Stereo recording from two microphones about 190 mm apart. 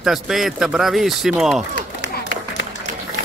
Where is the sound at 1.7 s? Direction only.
75° left (ahead or behind).